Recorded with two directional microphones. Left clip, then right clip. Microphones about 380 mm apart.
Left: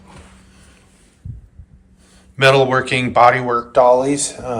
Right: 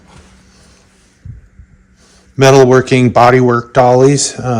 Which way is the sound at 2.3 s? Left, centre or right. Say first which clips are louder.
Right 6 dB; centre.